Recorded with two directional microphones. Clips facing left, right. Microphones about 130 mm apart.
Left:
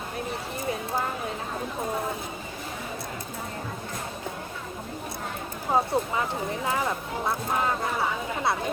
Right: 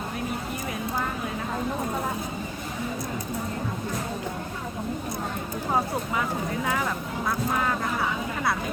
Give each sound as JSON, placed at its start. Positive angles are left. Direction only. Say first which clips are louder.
{"t": 5.7, "sound": "speech", "louder": "left 3 dB", "side_deg": 25}